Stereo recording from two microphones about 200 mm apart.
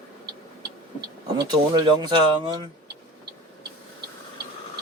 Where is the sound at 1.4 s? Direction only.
20° right (ahead or behind).